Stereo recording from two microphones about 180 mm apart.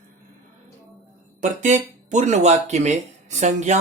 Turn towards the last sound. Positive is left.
turn(degrees=-40)  # may be behind; listen again after turning